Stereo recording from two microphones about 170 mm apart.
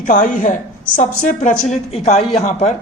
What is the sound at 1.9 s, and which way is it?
Speech, 40° left (ahead or behind).